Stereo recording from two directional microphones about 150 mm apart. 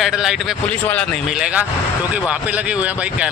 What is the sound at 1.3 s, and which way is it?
Speech, 5° right (ahead or behind).